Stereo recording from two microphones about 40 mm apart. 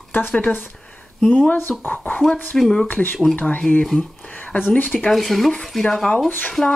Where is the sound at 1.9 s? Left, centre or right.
Left.